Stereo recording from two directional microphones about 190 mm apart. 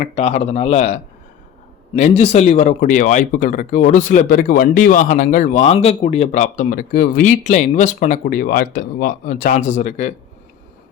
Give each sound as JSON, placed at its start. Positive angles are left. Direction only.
{"t": 0.2, "sound": "speech", "side_deg": 35}